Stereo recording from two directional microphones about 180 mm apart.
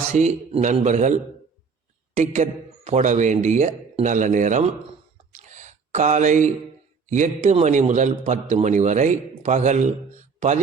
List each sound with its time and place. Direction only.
0.1 s a man's voice: 40° right (ahead or behind)
5.4 s a sound: 40° right (ahead or behind)
7.1 s a man's voice: 40° right (ahead or behind)